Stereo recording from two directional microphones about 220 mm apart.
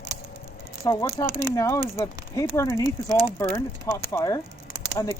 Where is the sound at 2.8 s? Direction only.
15° right (ahead or behind).